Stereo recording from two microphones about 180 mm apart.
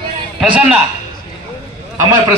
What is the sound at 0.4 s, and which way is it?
Speech, 5° right (ahead or behind).